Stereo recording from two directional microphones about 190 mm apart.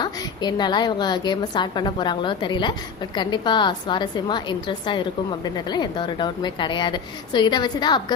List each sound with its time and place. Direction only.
0.0 s a woman's voice: 20° left (ahead or behind)